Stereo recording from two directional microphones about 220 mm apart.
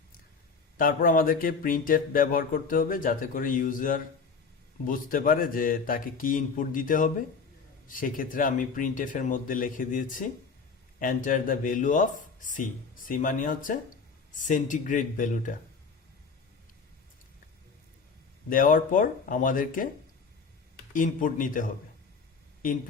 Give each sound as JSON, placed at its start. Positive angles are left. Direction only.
{"t": 0.8, "sound": "speech", "side_deg": 40}
{"t": 18.4, "sound": "speech", "side_deg": 40}
{"t": 20.9, "sound": "speech", "side_deg": 35}